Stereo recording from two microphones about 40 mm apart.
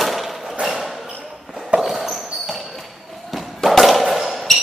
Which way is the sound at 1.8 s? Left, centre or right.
Centre.